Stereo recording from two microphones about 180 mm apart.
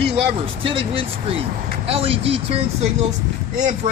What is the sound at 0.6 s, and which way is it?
Speech, 30° right (ahead or behind).